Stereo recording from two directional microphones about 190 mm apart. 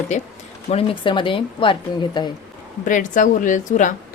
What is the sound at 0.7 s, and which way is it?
A woman's voice, 25° left (ahead or behind).